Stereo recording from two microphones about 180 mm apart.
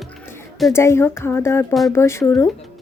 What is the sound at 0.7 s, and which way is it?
A woman's voice, 15° left (ahead or behind).